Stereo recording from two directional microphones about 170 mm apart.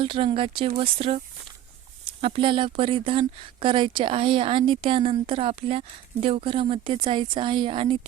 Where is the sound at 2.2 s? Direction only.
30° right (ahead or behind).